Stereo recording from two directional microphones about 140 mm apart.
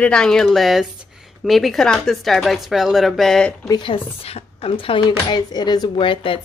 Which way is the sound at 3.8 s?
40° left (ahead or behind).